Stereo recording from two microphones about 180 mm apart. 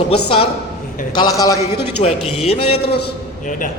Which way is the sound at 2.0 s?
35° left (ahead or behind).